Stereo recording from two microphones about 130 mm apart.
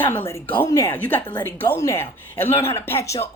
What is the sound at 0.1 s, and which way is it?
Speech, 20° left (ahead or behind).